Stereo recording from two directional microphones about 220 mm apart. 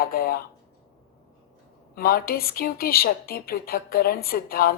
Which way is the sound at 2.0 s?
40° left (ahead or behind).